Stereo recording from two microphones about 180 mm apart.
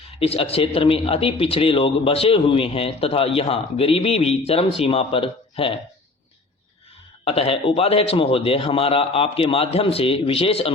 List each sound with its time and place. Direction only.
0.2 s a man's voice: 35° left (ahead or behind)
7.3 s a man's voice: 30° left (ahead or behind)